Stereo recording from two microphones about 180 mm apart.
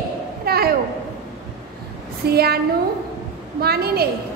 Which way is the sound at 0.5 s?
60° right (ahead or behind).